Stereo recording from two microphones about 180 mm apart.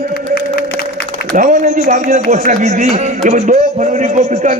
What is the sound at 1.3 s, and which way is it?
Speech, 45° right (ahead or behind).